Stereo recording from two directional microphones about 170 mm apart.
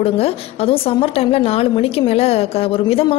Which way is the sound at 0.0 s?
35° left (ahead or behind).